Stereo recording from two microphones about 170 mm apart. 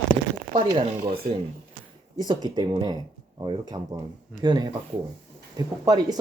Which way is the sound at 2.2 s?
25° right (ahead or behind).